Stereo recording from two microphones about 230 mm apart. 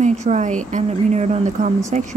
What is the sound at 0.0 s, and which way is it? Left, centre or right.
Speech, right.